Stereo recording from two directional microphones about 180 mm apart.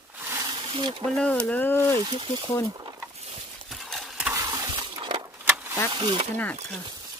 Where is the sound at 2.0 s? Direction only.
25° right (ahead or behind).